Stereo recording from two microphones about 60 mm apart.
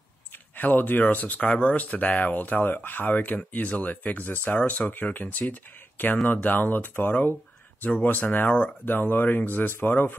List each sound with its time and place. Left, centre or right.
0.3 s speech: left
8.8 s speech: left